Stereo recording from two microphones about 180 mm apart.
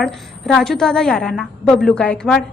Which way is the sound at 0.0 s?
5° left (ahead or behind).